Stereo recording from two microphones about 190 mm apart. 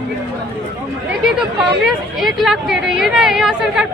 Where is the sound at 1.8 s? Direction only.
Centre (ahead or behind).